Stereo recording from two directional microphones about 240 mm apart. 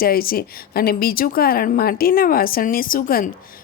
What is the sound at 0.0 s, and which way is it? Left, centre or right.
Speech, left.